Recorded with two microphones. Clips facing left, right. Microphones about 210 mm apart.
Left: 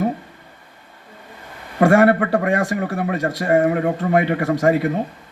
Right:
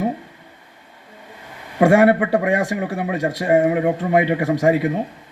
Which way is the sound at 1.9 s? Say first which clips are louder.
Even; 20° right (ahead or behind).